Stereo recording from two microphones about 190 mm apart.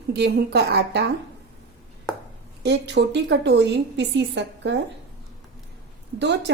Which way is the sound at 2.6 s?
65° right (ahead or behind).